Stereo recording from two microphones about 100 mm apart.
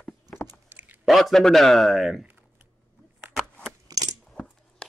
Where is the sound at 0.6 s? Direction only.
15° right (ahead or behind).